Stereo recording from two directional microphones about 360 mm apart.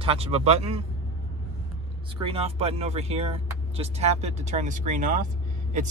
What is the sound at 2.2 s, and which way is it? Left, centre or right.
Speech, centre.